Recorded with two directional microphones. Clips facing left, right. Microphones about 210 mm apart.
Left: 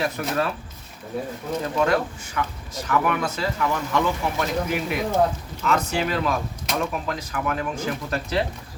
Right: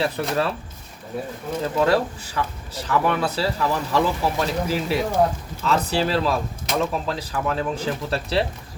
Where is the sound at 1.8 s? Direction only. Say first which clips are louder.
Right 3 dB; 35° right (ahead or behind).